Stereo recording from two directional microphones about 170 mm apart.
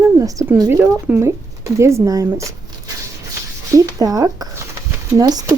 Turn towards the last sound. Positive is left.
turn(degrees=-20)  # may be behind; listen again after turning